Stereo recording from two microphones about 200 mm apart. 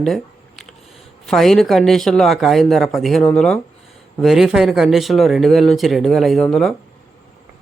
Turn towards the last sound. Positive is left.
turn(degrees=0)  # may be behind; listen again after turning